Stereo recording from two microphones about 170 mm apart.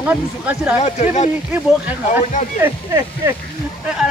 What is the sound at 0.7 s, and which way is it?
Speech, 40° left (ahead or behind).